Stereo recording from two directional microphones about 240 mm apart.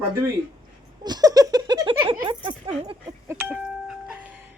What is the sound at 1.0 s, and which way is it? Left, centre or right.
Speech, centre.